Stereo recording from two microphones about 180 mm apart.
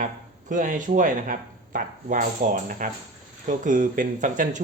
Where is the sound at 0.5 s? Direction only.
45° right (ahead or behind).